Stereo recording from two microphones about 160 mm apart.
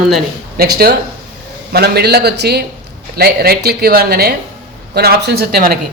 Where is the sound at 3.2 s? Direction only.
70° right (ahead or behind).